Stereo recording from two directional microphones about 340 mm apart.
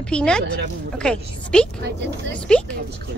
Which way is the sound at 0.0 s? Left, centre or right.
Centre.